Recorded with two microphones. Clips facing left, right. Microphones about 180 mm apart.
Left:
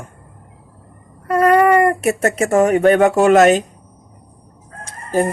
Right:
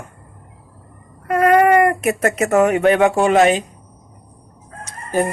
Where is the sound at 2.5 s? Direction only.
35° left (ahead or behind).